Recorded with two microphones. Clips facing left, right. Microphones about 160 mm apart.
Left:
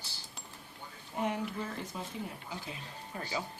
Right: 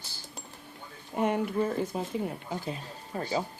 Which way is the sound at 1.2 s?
55° right (ahead or behind).